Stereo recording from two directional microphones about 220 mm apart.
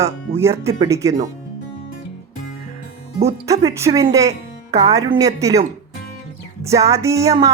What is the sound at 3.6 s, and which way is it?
Speech, 15° right (ahead or behind).